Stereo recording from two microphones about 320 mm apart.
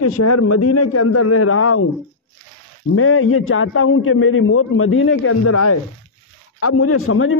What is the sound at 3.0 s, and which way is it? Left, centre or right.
A man's voice, left.